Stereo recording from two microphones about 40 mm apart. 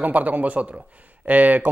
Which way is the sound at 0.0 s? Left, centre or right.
Right.